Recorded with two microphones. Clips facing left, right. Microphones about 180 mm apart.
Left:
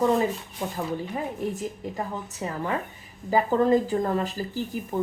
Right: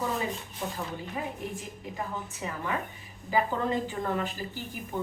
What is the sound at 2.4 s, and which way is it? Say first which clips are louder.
Speech: left 5 dB; 35° left (ahead or behind).